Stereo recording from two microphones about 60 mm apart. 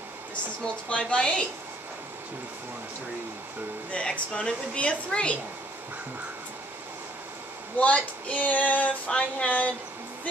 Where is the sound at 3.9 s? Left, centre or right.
Centre.